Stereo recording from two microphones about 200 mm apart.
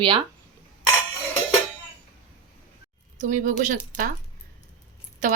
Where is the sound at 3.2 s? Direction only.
40° right (ahead or behind).